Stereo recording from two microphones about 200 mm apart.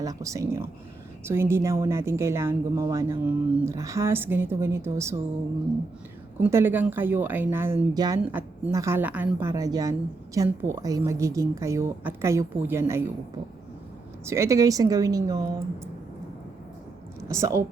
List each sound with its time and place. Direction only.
0.0 s speech: 15° right (ahead or behind)
6.4 s speech: 10° right (ahead or behind)
14.3 s speech: 15° right (ahead or behind)
17.2 s speech: 15° right (ahead or behind)